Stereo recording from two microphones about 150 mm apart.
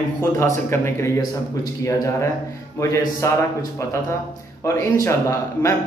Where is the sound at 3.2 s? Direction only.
20° left (ahead or behind).